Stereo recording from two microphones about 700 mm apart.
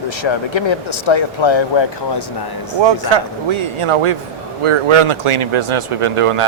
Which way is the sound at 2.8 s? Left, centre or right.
Right.